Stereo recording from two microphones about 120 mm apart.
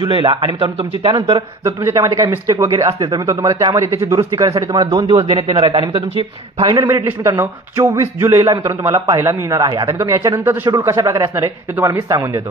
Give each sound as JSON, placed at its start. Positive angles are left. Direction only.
{"t": 0.0, "sound": "a man's voice", "side_deg": -45}
{"t": 1.6, "sound": "a man's voice", "side_deg": -25}
{"t": 4.9, "sound": "a man's voice", "side_deg": -40}
{"t": 6.9, "sound": "a man's voice", "side_deg": -20}